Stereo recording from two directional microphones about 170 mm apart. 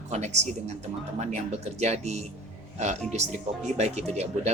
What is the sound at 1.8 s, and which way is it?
Speech, 40° right (ahead or behind).